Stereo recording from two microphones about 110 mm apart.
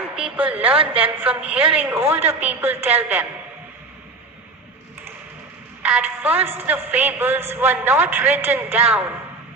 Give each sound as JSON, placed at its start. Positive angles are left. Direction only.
{"t": 0.2, "sound": "a sound", "side_deg": -15}
{"t": 0.7, "sound": "a woman's voice", "side_deg": -60}
{"t": 1.0, "sound": "a woman's voice", "side_deg": -15}
{"t": 5.8, "sound": "a woman's voice", "side_deg": -15}
{"t": 6.3, "sound": "a woman's voice", "side_deg": -65}
{"t": 6.6, "sound": "a woman's voice", "side_deg": -15}